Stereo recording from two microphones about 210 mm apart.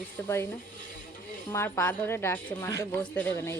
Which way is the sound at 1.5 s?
10° left (ahead or behind).